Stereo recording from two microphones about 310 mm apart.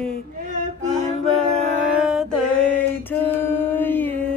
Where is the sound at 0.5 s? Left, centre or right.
Right.